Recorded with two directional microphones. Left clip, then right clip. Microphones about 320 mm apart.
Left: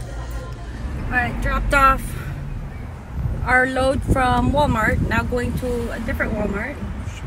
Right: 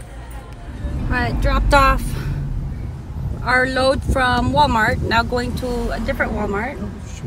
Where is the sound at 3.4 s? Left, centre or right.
Centre.